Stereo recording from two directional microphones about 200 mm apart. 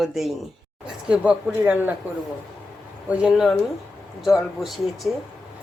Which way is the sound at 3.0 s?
Centre (ahead or behind).